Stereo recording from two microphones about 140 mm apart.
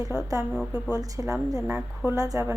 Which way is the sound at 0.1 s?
5° right (ahead or behind).